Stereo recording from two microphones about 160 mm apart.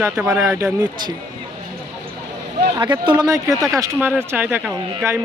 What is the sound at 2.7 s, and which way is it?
Speech, 30° right (ahead or behind).